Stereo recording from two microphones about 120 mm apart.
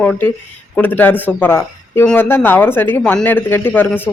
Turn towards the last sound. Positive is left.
turn(degrees=15)  # may be behind; listen again after turning